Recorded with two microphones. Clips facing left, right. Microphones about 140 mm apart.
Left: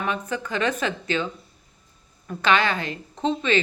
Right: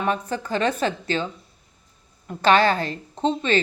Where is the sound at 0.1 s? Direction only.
35° right (ahead or behind).